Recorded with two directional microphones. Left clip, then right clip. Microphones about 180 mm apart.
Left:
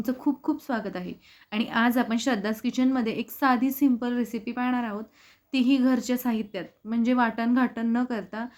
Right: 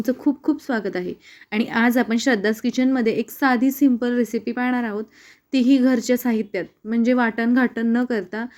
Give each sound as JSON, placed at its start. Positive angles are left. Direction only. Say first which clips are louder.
{"t": 0.0, "sound": "a woman's voice", "louder": "right 6 dB", "side_deg": -20}